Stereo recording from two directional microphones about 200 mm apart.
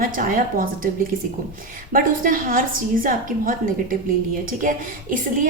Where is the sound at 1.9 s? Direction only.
45° right (ahead or behind).